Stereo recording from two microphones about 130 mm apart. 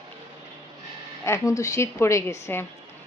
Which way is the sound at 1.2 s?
25° left (ahead or behind).